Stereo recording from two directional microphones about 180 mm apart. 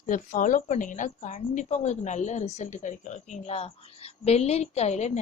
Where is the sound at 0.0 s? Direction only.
45° left (ahead or behind).